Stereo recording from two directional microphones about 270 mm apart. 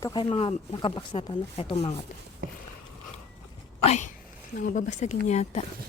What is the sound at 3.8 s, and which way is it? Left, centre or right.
Speech, left.